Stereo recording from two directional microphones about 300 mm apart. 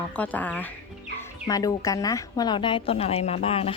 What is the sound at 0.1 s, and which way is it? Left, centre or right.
A woman's voice, centre.